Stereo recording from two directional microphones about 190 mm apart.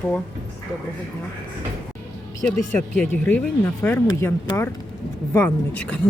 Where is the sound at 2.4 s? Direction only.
5° left (ahead or behind).